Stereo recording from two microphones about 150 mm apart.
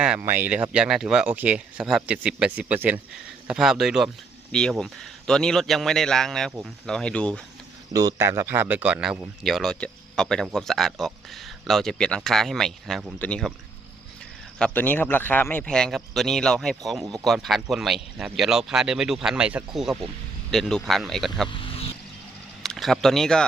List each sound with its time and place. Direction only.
0.0 s speech: 10° right (ahead or behind); by 7.4 s 5° left (ahead or behind)
7.9 s speech: 20° right (ahead or behind); by 13.5 s 5° left (ahead or behind)
14.6 s speech: 10° left (ahead or behind)
21.5 s vehicle: 35° left (ahead or behind)
22.6 s speech: centre (ahead or behind)